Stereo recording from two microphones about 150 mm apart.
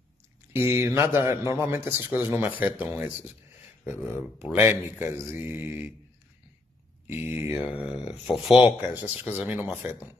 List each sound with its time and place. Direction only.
0.5 s a man's voice: 15° right (ahead or behind)
7.1 s a man's voice: 15° right (ahead or behind)